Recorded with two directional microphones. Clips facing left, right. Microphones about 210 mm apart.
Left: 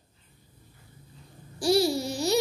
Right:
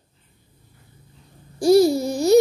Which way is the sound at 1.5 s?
50° right (ahead or behind).